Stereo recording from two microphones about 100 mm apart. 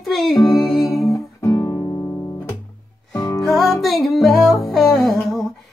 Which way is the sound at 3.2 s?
35° left (ahead or behind).